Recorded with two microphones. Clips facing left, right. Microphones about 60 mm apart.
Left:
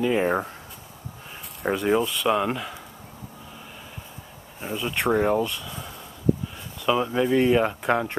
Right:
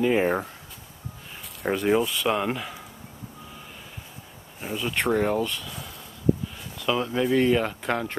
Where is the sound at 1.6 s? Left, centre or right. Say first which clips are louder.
Even; centre.